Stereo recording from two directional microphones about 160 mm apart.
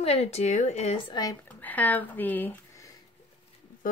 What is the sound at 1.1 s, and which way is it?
Speech, 25° left (ahead or behind).